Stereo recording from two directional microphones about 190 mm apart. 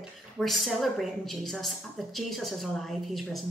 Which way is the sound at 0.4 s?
Centre (ahead or behind).